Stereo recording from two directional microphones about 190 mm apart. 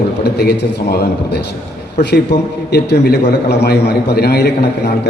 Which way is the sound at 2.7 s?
60° left (ahead or behind).